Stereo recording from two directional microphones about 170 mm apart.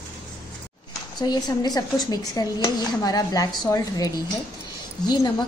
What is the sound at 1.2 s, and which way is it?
A woman's voice, 25° left (ahead or behind).